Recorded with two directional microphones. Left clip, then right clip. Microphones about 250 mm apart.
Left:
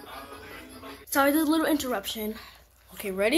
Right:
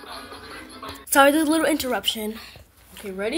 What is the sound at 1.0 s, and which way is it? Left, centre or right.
A woman's voice, centre.